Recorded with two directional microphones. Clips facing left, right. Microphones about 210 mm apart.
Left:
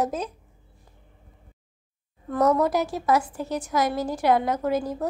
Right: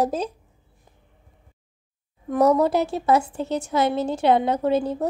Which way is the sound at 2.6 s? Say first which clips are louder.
Right 3 dB; 25° right (ahead or behind).